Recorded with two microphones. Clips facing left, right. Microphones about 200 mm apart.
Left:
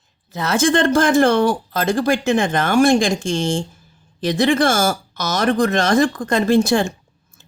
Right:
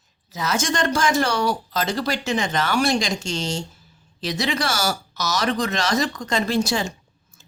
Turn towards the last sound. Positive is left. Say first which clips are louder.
# left 7 dB
turn(degrees=55)  # may be behind; listen again after turning